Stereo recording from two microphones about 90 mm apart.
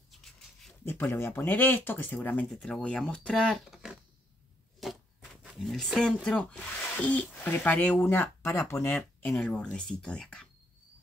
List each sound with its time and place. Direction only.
0.1 s dog: 5° left (ahead or behind)
0.8 s speech: 20° left (ahead or behind)
2.5 s speech: 5° left (ahead or behind)
4.7 s a sound: centre (ahead or behind)
5.6 s speech: centre (ahead or behind); by 8.9 s 30° left (ahead or behind)
9.4 s speech: 10° left (ahead or behind)